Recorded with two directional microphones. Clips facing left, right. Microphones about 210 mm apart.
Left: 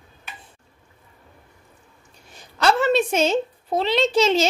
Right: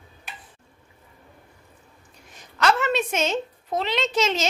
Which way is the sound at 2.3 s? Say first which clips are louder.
Left 2 dB; 30° left (ahead or behind).